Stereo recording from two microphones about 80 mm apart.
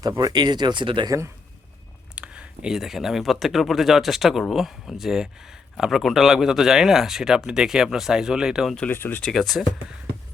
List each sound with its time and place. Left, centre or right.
0.2 s speech: right
1.0 s a man's voice: right
2.1 s speech: centre
8.9 s speech: left
9.2 s speech: centre